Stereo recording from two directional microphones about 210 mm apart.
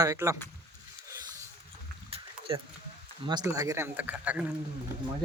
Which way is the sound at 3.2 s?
15° right (ahead or behind).